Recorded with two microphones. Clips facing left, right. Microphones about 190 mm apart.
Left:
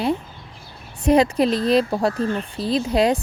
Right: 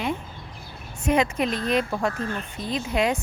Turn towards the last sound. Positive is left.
turn(degrees=35)  # may be behind; listen again after turning